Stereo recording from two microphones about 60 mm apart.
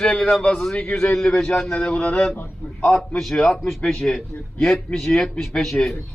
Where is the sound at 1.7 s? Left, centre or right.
Centre.